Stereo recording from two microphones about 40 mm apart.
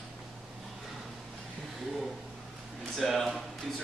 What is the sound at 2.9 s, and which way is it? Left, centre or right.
Speech, centre.